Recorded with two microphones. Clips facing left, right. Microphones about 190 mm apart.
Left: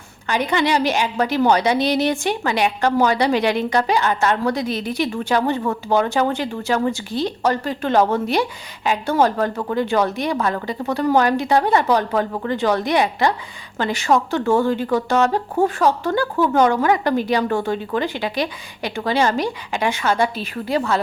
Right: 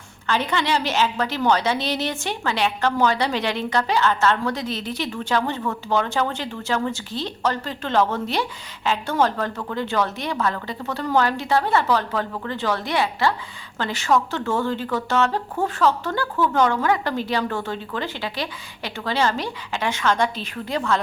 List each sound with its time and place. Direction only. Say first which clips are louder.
0.3 s a woman's voice: left 3 dB; 15° left (ahead or behind)